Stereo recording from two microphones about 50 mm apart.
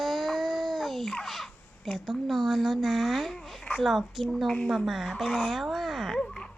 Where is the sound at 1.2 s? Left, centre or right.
Centre.